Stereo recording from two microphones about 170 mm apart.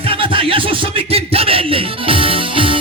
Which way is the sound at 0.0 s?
30° right (ahead or behind).